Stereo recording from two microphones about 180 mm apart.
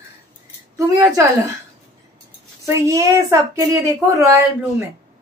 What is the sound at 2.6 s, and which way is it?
A woman's voice, 15° right (ahead or behind).